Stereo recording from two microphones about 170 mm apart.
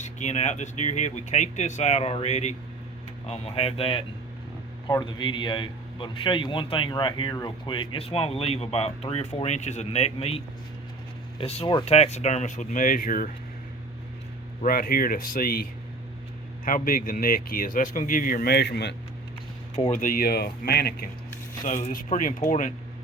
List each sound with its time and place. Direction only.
0.0 s a man's voice: 45° left (ahead or behind)
14.6 s speech: 60° left (ahead or behind)
16.6 s speech: 55° left (ahead or behind); by 18.9 s 80° left
19.7 s speech: 45° left (ahead or behind); by 21.1 s 65° left (ahead or behind)
21.6 s speech: 50° left (ahead or behind)